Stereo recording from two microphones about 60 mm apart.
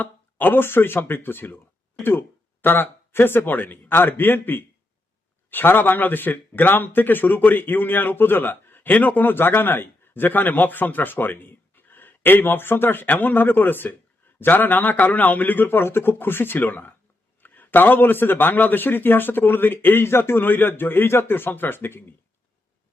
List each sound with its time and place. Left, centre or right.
0.0 s speech: left